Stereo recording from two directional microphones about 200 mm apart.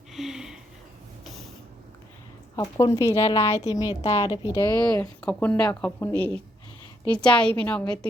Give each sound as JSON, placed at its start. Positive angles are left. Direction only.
{"t": 0.1, "sound": "a sound", "side_deg": 0}
{"t": 2.6, "sound": "speech", "side_deg": 15}
{"t": 3.2, "sound": "a woman's voice", "side_deg": 30}
{"t": 3.6, "sound": "a woman's voice", "side_deg": 20}
{"t": 4.7, "sound": "a woman's voice", "side_deg": 5}